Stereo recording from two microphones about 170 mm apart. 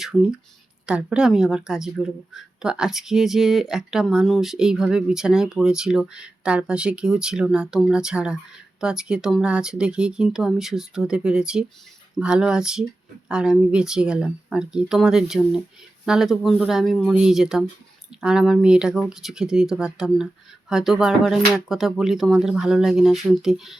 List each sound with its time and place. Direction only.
0.0 s a woman's voice: 5° right (ahead or behind)